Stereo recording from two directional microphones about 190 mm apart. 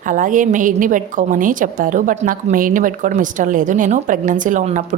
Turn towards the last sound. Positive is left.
turn(degrees=-40)  # may be behind; listen again after turning